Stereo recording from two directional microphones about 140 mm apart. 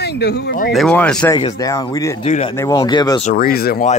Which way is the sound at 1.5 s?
25° left (ahead or behind).